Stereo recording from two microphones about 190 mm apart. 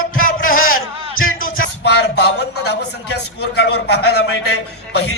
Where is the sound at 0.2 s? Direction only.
45° left (ahead or behind).